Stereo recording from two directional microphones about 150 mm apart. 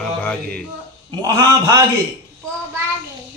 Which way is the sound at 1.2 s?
25° right (ahead or behind).